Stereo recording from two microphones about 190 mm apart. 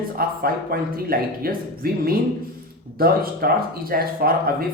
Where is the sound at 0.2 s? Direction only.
50° right (ahead or behind).